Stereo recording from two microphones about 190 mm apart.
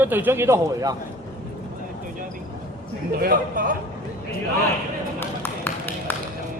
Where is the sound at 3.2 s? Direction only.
45° right (ahead or behind).